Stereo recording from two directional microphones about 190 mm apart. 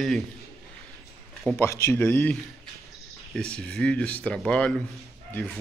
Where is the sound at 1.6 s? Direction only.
15° left (ahead or behind).